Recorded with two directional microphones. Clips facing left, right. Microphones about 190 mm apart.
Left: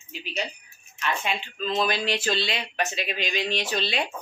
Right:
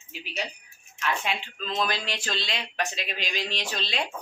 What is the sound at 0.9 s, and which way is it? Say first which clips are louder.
A woman's voice: left 1 dB; centre (ahead or behind).